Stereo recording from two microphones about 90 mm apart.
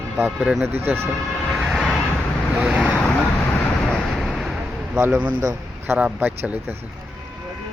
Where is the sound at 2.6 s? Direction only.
15° right (ahead or behind).